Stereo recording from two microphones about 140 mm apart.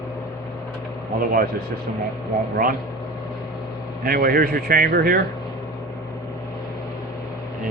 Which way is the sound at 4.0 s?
90° right.